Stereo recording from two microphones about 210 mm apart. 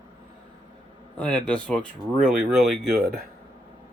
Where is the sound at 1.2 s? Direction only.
5° left (ahead or behind).